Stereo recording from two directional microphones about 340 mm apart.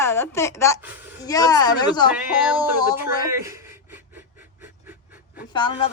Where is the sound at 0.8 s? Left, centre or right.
Centre.